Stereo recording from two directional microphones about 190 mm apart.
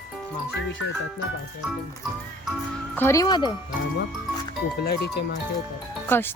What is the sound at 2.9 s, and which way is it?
Speech, 15° left (ahead or behind).